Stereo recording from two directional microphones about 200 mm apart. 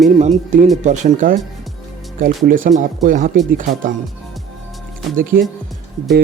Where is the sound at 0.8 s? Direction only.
35° right (ahead or behind).